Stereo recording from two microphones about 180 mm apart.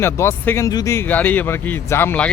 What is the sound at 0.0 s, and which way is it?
Speech, 15° left (ahead or behind).